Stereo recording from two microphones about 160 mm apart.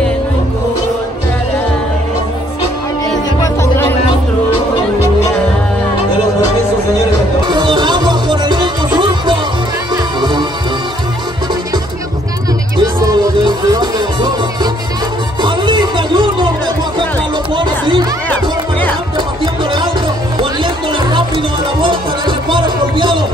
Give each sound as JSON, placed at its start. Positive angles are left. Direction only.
{"t": 7.4, "sound": "music", "side_deg": -30}
{"t": 13.0, "sound": "music", "side_deg": -25}
{"t": 17.6, "sound": "chatter", "side_deg": -30}
{"t": 19.1, "sound": "music", "side_deg": -30}